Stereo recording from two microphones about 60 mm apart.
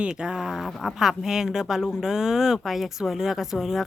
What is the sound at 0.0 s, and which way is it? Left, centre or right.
Speech, centre.